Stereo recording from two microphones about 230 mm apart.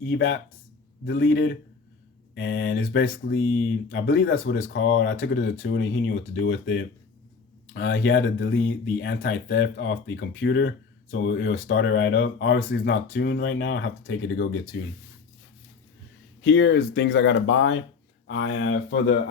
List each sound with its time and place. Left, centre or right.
0.0 s speech: left
16.4 s speech: left